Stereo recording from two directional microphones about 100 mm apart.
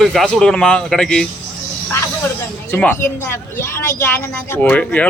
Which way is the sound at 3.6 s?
25° left (ahead or behind).